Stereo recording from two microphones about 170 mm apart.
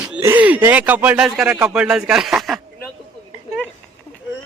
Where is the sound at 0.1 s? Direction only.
15° right (ahead or behind).